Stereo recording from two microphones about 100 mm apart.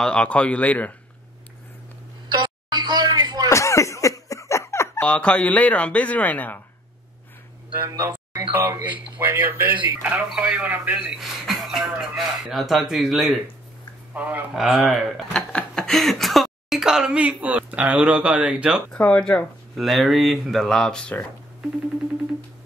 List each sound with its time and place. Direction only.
0.0 s speech: 10° left (ahead or behind)
2.2 s a sound: 50° right (ahead or behind)
3.4 s a sound: 30° left (ahead or behind)
5.0 s speech: 10° left (ahead or behind)
8.5 s speech: 20° right (ahead or behind)
11.1 s speech: centre (ahead or behind)
14.1 s speech: 15° right (ahead or behind)
14.5 s speech: centre (ahead or behind)
18.9 s speech: 10° left (ahead or behind)